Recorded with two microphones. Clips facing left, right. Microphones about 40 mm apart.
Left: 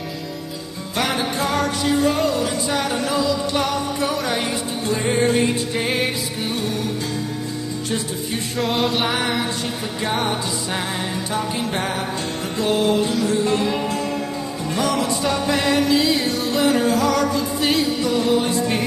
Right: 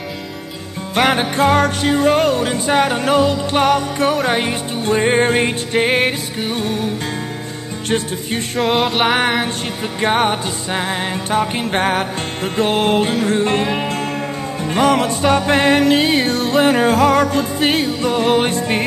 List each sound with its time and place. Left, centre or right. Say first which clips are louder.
0.9 s music: right 7 dB; right
8.5 s music: right 4 dB; centre
9.9 s music: right 7 dB; right
10.7 s music: right 7 dB; right